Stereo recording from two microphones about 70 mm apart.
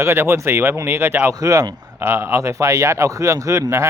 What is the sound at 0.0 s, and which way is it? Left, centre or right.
Speech, right.